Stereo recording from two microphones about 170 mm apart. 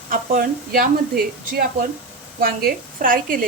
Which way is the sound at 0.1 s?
55° right (ahead or behind).